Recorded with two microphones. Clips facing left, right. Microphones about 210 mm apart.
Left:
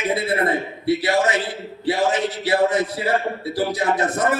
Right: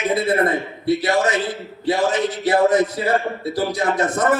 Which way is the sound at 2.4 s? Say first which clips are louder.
Right 4 dB; 45° right (ahead or behind).